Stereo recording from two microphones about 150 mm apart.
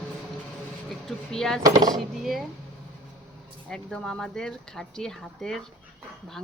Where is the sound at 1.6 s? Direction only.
25° right (ahead or behind).